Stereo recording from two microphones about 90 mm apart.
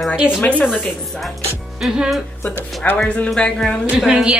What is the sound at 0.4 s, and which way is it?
Speech, 15° left (ahead or behind).